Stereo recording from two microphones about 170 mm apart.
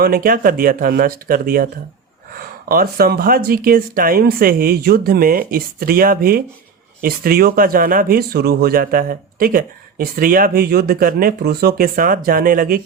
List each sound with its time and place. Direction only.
0.0 s speech: 60° right (ahead or behind)